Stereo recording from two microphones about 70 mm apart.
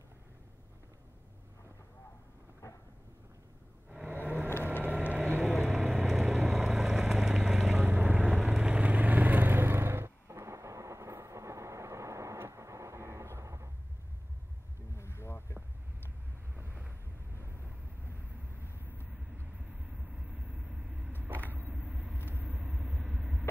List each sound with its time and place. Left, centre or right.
3.9 s vehicle: right
5.7 s vehicle: centre
7.8 s vehicle: right
15.0 s boat: left
16.5 s boat: right
20.2 s vehicle: centre
21.2 s vehicle: right